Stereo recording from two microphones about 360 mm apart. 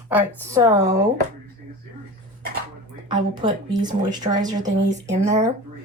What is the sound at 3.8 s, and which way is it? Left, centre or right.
Speech, centre.